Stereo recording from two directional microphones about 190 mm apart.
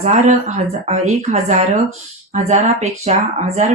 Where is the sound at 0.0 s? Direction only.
35° right (ahead or behind).